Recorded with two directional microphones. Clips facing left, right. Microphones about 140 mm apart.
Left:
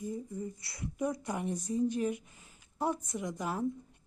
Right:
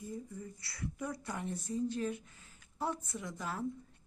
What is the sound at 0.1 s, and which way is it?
A woman's voice, 20° left (ahead or behind).